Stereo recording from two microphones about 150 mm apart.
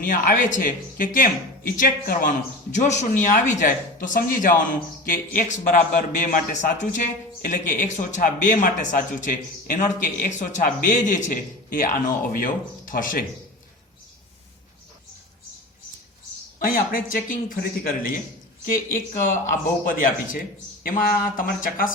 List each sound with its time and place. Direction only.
0.0 s speech: 65° left (ahead or behind)
2.7 s speech: 50° left (ahead or behind)
16.6 s speech: 70° left (ahead or behind)
19.2 s speech: 60° left (ahead or behind)